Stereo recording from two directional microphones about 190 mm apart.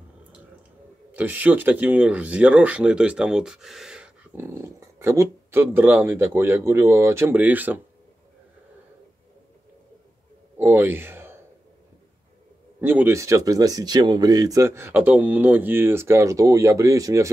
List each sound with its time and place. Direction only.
1.1 s speech: 10° right (ahead or behind)
10.6 s speech: 10° right (ahead or behind)
12.8 s speech: 10° right (ahead or behind)